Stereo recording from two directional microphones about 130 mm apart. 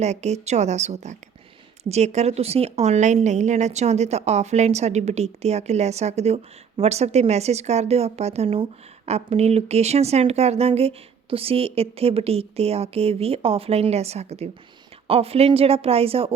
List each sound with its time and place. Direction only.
0.0 s a woman's voice: 60° right (ahead or behind)